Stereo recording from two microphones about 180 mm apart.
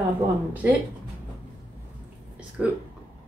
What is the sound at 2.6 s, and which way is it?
Speech, 5° right (ahead or behind).